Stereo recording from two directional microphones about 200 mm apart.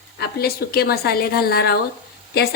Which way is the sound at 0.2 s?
50° left (ahead or behind).